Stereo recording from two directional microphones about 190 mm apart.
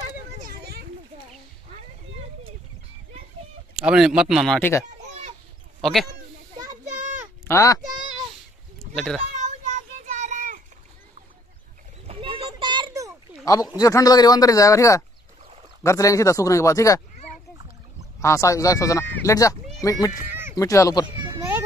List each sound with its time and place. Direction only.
0.5 s children playing: 55° right (ahead or behind)
3.7 s speech: 5° right (ahead or behind)
4.6 s speech: 10° left (ahead or behind)
6.8 s a sound: 40° right (ahead or behind)
7.4 s speech: 15° left (ahead or behind)
8.7 s bleat: centre (ahead or behind)
9.4 s child singing: 40° right (ahead or behind)
12.1 s a sound: 30° right (ahead or behind)
13.7 s speech: 20° left (ahead or behind)
18.2 s speech: 15° left (ahead or behind)
21.2 s cat: 15° right (ahead or behind)